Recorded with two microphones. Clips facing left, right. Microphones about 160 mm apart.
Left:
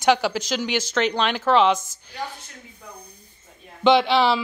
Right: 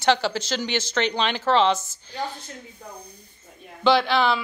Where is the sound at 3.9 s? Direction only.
20° left (ahead or behind).